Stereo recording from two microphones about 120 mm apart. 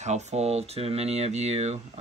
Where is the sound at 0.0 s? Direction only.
70° right (ahead or behind).